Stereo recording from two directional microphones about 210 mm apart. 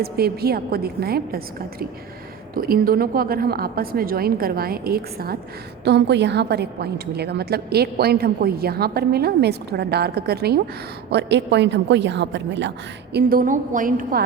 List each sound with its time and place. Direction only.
0.0 s a woman's voice: 45° right (ahead or behind)
2.6 s a woman's voice: 45° right (ahead or behind)
13.1 s a woman's voice: 45° right (ahead or behind)